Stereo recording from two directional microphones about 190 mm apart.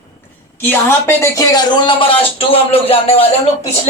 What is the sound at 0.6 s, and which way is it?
Speech, 10° left (ahead or behind).